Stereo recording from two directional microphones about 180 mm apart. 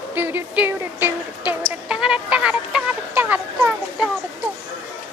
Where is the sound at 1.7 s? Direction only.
5° right (ahead or behind).